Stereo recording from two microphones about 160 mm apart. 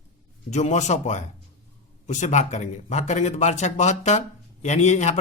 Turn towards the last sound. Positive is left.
turn(degrees=45)  # may be behind; listen again after turning